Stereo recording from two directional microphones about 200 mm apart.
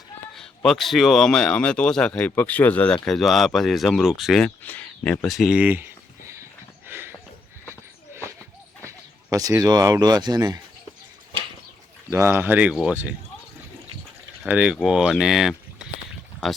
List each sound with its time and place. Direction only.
0.3 s speech: centre (ahead or behind)
6.8 s a sound: 10° right (ahead or behind)
7.7 s dog: 15° right (ahead or behind)
8.9 s speech: 15° right (ahead or behind)
12.1 s speech: 10° right (ahead or behind)
14.4 s speech: 5° right (ahead or behind)